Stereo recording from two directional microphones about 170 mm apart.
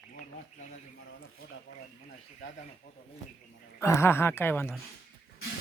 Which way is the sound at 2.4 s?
90° left.